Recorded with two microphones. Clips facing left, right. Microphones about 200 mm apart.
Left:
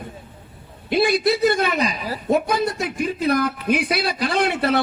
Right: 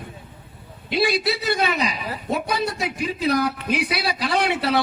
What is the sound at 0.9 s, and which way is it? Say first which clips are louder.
A man's voice: left 4 dB; 50° left (ahead or behind).